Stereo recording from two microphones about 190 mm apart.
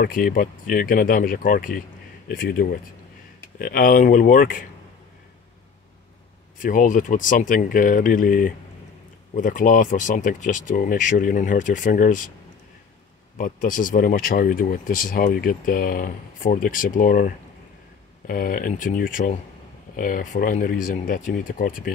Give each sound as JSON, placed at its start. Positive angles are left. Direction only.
{"t": 0.0, "sound": "speech", "side_deg": 45}
{"t": 6.6, "sound": "speech", "side_deg": 45}
{"t": 13.4, "sound": "speech", "side_deg": 45}